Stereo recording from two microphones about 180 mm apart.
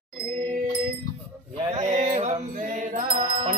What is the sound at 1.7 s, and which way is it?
Mantra, 40° right (ahead or behind).